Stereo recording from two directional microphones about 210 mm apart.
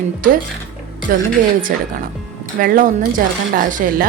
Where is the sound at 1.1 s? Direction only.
40° right (ahead or behind).